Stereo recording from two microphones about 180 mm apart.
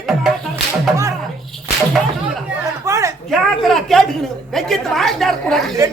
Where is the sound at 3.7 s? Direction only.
Centre (ahead or behind).